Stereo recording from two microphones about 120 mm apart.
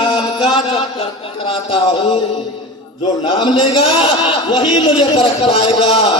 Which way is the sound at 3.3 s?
45° left (ahead or behind).